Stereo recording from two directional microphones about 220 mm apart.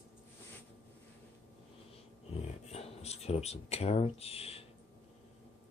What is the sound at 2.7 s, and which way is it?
Speech, 30° left (ahead or behind).